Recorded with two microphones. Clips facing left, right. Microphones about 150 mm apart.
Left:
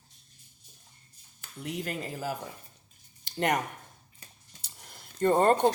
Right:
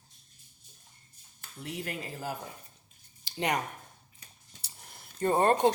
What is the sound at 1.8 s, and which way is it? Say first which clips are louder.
Speech: left 2 dB; 40° left (ahead or behind).